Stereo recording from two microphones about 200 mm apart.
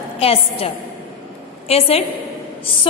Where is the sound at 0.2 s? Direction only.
30° left (ahead or behind).